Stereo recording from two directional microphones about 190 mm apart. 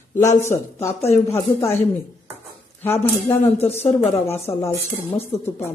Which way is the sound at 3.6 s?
35° left (ahead or behind).